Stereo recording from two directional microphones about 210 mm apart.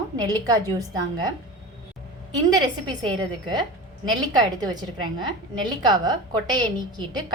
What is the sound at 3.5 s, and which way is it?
A woman's voice, 20° right (ahead or behind).